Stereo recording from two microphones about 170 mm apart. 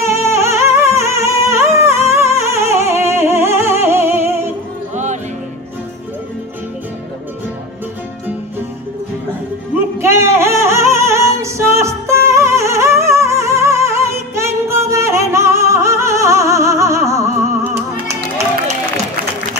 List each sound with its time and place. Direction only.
0.0 s music: 15° right (ahead or behind)
4.9 s music: 45° right (ahead or behind)
10.0 s music: 15° right (ahead or behind)